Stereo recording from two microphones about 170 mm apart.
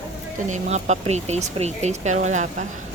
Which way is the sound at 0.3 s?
45° right (ahead or behind).